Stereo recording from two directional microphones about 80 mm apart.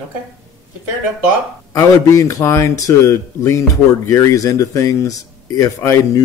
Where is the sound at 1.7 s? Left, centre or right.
Left.